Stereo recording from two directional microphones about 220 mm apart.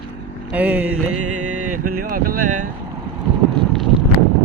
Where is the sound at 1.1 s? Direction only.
90° right.